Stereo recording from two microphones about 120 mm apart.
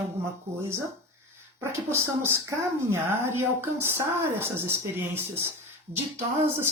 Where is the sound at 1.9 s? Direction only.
20° right (ahead or behind).